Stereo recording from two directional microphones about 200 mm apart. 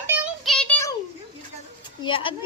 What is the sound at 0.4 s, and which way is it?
Child singing, 5° left (ahead or behind).